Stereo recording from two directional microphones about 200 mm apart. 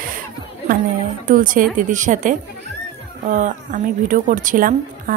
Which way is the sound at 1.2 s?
40° right (ahead or behind).